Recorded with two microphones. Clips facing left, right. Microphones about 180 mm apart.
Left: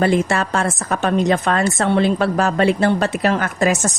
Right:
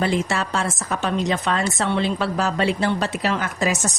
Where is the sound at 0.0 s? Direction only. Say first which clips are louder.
Left 5 dB; 55° left (ahead or behind).